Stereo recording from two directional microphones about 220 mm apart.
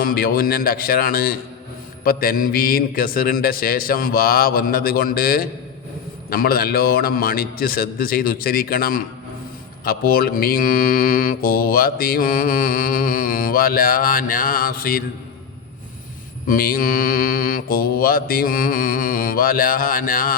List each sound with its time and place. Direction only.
0.0 s mantra: 40° left (ahead or behind)
16.5 s mantra: 40° left (ahead or behind)